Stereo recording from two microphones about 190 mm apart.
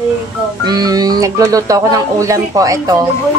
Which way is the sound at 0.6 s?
20° right (ahead or behind).